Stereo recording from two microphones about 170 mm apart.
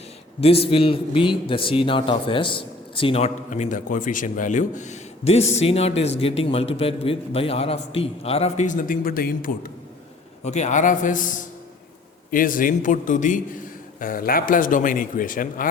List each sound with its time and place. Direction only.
0.3 s a man's voice: 35° left (ahead or behind); by 9.7 s 60° left (ahead or behind)
10.4 s speech: 45° left (ahead or behind)